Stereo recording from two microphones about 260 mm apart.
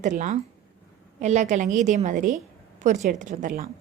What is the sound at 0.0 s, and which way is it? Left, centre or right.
A woman's voice, right.